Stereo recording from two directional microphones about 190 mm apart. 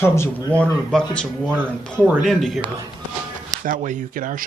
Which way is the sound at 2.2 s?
Centre (ahead or behind).